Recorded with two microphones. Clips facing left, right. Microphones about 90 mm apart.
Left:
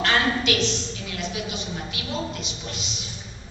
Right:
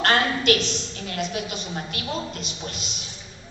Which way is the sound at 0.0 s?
45° right (ahead or behind).